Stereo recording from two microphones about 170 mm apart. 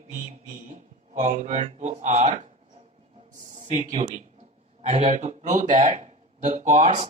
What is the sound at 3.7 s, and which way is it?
Speech, 45° right (ahead or behind).